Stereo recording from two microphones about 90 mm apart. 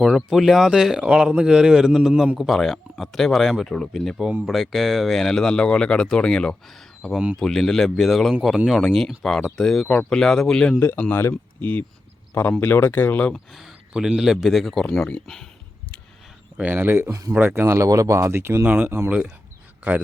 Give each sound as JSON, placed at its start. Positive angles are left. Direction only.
{"t": 0.3, "sound": "speech", "side_deg": 0}
{"t": 10.8, "sound": "speech", "side_deg": 25}
{"t": 13.3, "sound": "speech", "side_deg": 0}
{"t": 16.6, "sound": "speech", "side_deg": -20}
{"t": 17.3, "sound": "speech", "side_deg": -20}
{"t": 17.8, "sound": "speech", "side_deg": -40}